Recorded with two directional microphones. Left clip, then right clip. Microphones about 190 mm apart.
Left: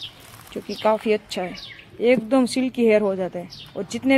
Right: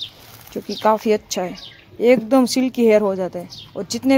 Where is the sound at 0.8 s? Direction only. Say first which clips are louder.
Right 3 dB; 20° right (ahead or behind).